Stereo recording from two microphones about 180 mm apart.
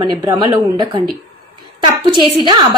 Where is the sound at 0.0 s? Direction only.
20° right (ahead or behind).